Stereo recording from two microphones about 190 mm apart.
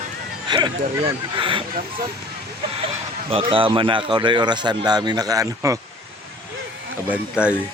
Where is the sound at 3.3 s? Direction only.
30° right (ahead or behind).